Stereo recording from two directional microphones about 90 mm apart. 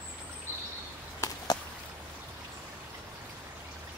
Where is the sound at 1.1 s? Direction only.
40° left (ahead or behind).